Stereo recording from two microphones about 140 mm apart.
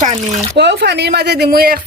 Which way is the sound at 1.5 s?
90° right.